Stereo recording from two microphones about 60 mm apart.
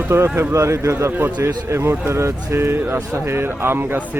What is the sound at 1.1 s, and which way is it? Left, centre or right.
Speech, right.